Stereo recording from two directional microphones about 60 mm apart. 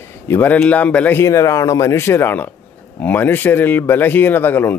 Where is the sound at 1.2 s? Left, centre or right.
Left.